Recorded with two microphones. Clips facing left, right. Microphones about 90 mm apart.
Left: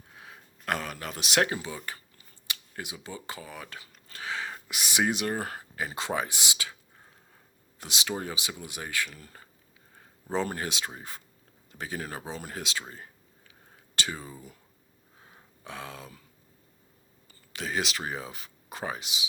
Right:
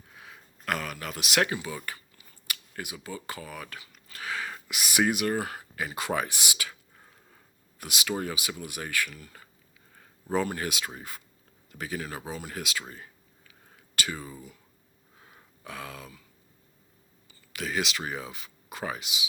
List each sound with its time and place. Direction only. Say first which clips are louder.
0.2 s speech: even; 35° left (ahead or behind)
5.4 s speech: right 1 dB; 40° left (ahead or behind)
7.8 s speech: right 2 dB; 25° left (ahead or behind)
9.1 s speech: right 1 dB; 35° left (ahead or behind)
10.4 s speech: right 1 dB; 35° left (ahead or behind)
13.5 s whispering: even; 30° left (ahead or behind)
15.2 s a sound: right 1 dB; 30° left (ahead or behind)
17.5 s speech: right 1 dB; 30° left (ahead or behind)